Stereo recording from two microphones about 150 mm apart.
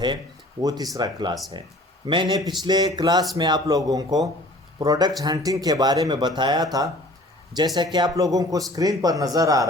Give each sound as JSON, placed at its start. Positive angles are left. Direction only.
{"t": 0.6, "sound": "a man's voice", "side_deg": -25}